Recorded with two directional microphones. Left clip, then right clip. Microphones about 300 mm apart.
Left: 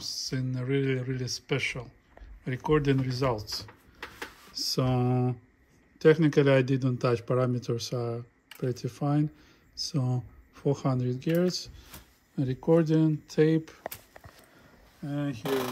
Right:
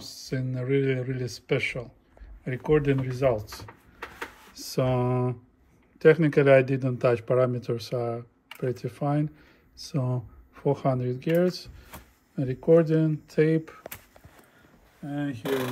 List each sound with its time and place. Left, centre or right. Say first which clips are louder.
0.0 s speech: left 1 dB; centre
4.6 s a sound: right 2 dB; centre
5.9 s speech: right 2 dB; centre
15.0 s speech: right 2 dB; centre